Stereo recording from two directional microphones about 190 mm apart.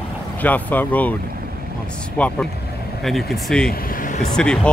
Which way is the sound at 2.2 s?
5° left (ahead or behind).